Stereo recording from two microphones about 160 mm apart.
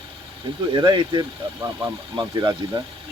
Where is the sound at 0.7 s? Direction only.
30° right (ahead or behind).